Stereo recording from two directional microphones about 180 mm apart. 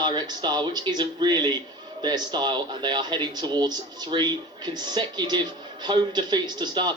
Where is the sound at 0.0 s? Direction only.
25° right (ahead or behind).